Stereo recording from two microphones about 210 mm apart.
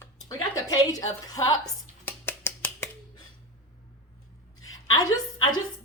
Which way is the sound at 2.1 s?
10° left (ahead or behind).